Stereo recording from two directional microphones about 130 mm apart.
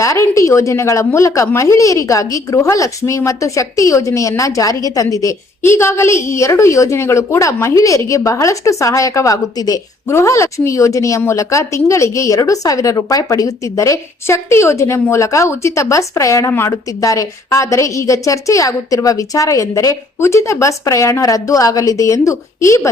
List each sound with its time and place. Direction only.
0.0 s a woman's voice: 25° left (ahead or behind)